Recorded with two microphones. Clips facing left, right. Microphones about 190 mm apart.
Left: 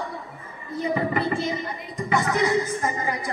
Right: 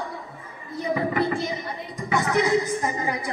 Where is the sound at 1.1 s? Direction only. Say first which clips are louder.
Right 1 dB; centre (ahead or behind).